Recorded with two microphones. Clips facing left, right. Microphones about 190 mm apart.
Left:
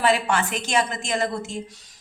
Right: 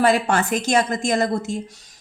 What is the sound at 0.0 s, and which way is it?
A woman's voice, 40° right (ahead or behind).